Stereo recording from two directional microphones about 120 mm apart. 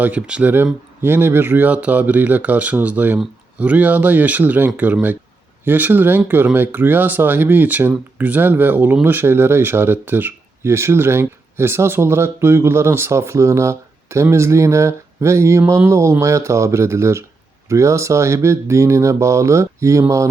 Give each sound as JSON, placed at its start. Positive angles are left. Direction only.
{"t": 0.0, "sound": "speech", "side_deg": -10}